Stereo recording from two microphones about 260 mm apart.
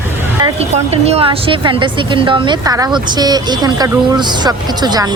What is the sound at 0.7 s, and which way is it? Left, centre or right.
A woman's voice, right.